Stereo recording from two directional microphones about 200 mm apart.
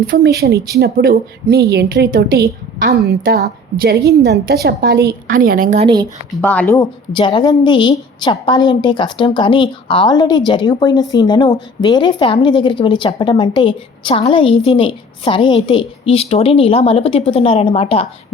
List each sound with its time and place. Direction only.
0.1 s a woman's voice: 50° right (ahead or behind)
5.8 s speech: 20° right (ahead or behind)
6.4 s speech: 5° left (ahead or behind)
7.1 s a woman's voice: 25° left (ahead or behind)